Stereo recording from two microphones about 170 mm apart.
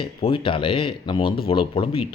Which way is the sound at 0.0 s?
30° left (ahead or behind).